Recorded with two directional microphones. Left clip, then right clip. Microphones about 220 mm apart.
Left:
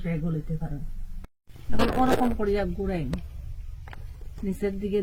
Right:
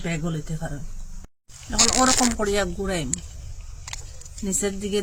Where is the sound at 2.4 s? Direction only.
20° right (ahead or behind).